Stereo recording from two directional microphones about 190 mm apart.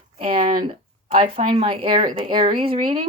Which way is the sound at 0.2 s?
30° right (ahead or behind).